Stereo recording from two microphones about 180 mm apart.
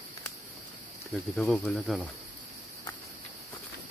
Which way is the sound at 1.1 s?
Centre (ahead or behind).